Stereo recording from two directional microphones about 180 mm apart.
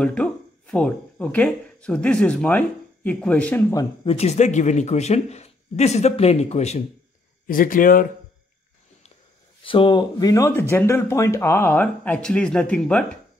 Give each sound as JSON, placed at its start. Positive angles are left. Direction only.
{"t": 0.0, "sound": "speech", "side_deg": 5}
{"t": 4.0, "sound": "speech", "side_deg": 35}
{"t": 7.4, "sound": "speech", "side_deg": 50}
{"t": 9.7, "sound": "speech", "side_deg": 25}